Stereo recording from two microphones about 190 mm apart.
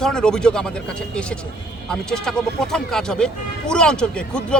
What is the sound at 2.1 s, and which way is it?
Speech, 5° left (ahead or behind).